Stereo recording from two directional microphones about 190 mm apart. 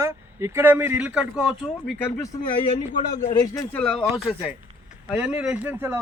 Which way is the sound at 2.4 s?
25° left (ahead or behind).